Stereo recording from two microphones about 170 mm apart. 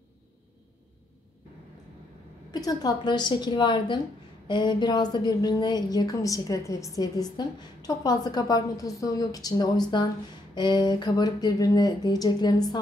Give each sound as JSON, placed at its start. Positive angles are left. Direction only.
{"t": 2.5, "sound": "a woman's voice", "side_deg": 20}